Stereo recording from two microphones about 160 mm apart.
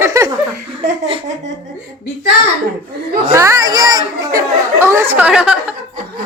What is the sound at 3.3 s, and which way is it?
Speech, 20° right (ahead or behind).